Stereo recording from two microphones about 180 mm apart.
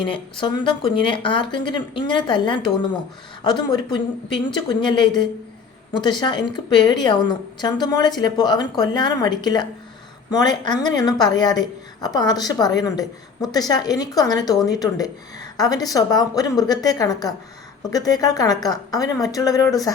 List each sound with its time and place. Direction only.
0.0 s a woman's voice: 25° left (ahead or behind)